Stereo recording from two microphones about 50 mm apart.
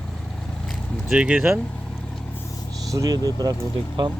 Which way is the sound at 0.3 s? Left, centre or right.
Centre.